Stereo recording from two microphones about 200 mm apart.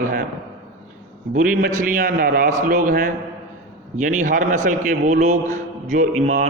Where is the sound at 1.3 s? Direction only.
45° right (ahead or behind).